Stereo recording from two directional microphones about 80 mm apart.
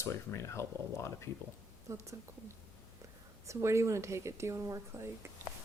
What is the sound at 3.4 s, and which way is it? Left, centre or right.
Speech, right.